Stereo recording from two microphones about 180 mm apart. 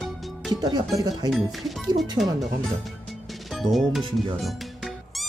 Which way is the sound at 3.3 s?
Centre (ahead or behind).